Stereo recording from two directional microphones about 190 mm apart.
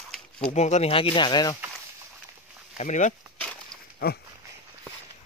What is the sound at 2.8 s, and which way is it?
Speech, 40° left (ahead or behind).